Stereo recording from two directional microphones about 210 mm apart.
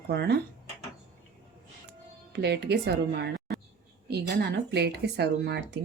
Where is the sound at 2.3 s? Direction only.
50° right (ahead or behind).